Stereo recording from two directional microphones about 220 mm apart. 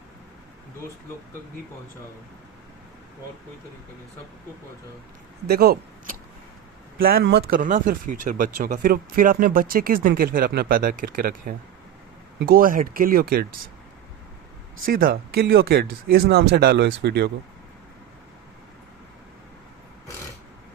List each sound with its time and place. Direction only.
5.5 s speech: 45° right (ahead or behind)
14.8 s speech: 40° right (ahead or behind)